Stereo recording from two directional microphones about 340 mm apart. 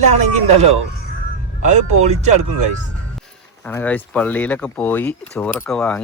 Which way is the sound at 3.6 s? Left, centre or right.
Centre.